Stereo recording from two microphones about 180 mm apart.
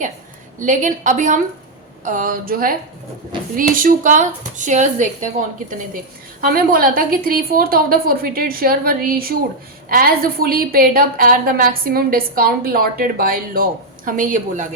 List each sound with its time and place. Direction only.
0.6 s a woman's voice: 45° right (ahead or behind)
6.4 s a woman's voice: 55° right (ahead or behind)